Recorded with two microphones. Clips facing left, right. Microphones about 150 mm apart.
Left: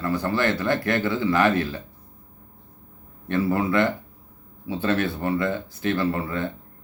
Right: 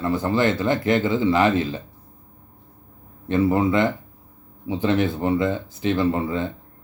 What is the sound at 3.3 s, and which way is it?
Speech, 20° right (ahead or behind).